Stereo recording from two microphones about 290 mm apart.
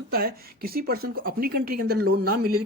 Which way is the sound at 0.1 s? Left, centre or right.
Right.